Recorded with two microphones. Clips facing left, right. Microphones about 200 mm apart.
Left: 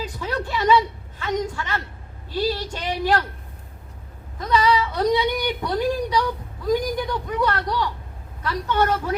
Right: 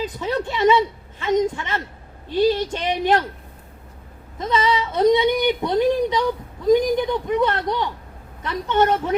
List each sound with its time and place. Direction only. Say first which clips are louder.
0.0 s a sound: right 4 dB; 20° right (ahead or behind)
2.3 s speech: right 6 dB; 20° right (ahead or behind)
4.4 s speech: left 1 dB; 20° right (ahead or behind)